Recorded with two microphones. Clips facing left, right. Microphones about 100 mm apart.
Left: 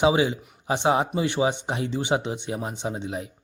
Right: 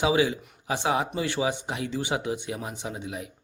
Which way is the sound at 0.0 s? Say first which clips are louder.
Left 3 dB; 25° left (ahead or behind).